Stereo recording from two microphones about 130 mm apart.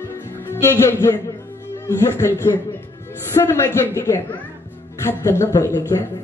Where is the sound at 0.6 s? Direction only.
20° left (ahead or behind).